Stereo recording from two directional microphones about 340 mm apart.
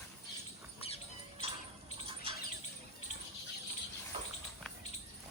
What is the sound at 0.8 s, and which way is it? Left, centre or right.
Rodents, centre.